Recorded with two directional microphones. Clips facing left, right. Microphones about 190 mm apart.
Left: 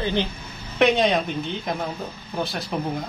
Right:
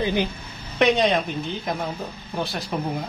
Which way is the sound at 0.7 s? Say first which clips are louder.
Even; centre (ahead or behind).